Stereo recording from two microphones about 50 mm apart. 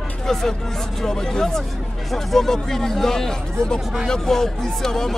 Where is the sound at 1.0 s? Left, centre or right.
Centre.